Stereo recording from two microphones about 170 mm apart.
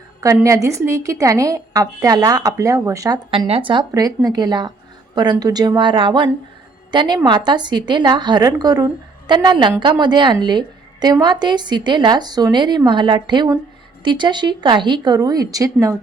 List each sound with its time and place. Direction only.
0.4 s a woman's voice: 15° right (ahead or behind)
3.3 s a woman's voice: 35° right (ahead or behind)